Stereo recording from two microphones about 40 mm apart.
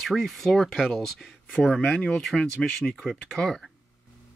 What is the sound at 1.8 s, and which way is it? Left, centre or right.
Speech, left.